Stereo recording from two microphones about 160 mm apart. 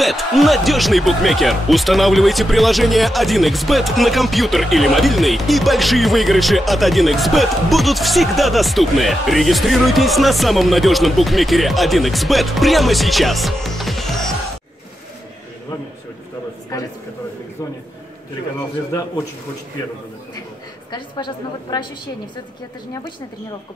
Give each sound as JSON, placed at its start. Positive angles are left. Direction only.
{"t": 0.0, "sound": "speech", "side_deg": 0}
{"t": 16.7, "sound": "a sound", "side_deg": 20}
{"t": 20.9, "sound": "a woman's voice", "side_deg": 30}